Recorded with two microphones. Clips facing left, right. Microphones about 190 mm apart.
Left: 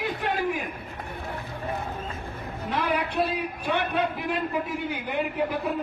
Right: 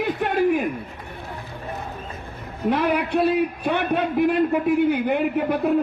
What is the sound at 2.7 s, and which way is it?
A man's voice, 65° right (ahead or behind).